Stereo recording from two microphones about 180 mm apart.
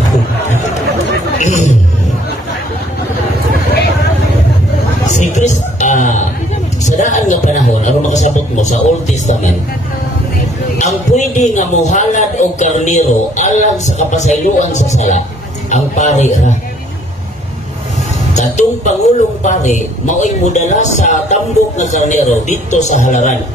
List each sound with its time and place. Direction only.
1.4 s music: 40° left (ahead or behind)
5.0 s a sound: 40° left (ahead or behind)
11.1 s a man's voice: 40° left (ahead or behind)
18.3 s a woman's voice: 40° left (ahead or behind)